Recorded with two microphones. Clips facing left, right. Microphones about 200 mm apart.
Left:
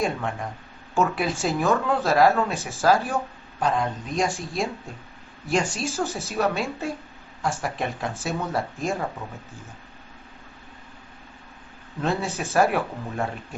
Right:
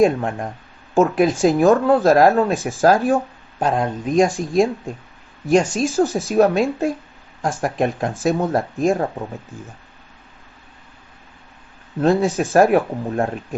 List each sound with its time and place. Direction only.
0.0 s speech: 50° right (ahead or behind)
12.0 s speech: 45° right (ahead or behind)